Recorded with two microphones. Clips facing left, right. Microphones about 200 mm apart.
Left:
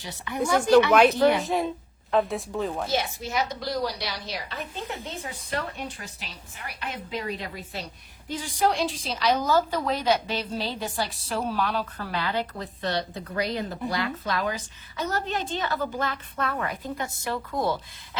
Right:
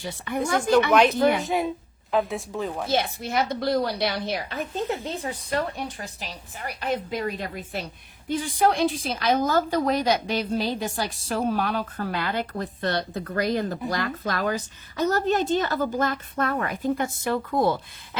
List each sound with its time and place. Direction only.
1.2 s speech: centre (ahead or behind)
2.9 s a woman's voice: 60° right (ahead or behind)
5.0 s a woman's voice: 35° right (ahead or behind); by 18.2 s 55° right (ahead or behind)